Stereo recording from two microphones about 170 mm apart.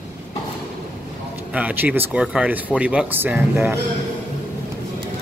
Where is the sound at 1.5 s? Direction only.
10° right (ahead or behind).